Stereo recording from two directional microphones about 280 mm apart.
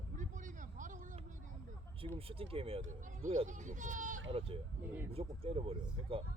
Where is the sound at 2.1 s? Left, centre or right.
Centre.